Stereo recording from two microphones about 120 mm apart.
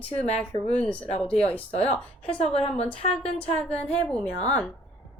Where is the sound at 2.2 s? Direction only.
55° left (ahead or behind).